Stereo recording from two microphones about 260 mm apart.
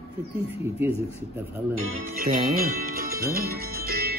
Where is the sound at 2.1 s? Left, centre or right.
Right.